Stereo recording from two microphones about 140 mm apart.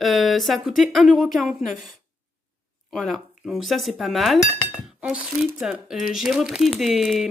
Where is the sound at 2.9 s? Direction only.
Centre (ahead or behind).